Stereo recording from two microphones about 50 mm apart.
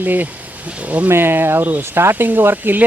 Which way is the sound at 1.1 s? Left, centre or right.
Right.